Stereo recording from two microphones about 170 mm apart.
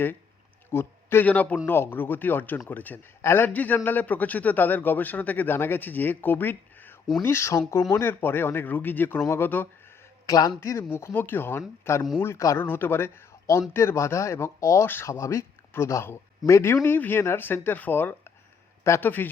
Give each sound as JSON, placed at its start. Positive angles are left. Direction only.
{"t": 0.7, "sound": "a man's voice", "side_deg": 15}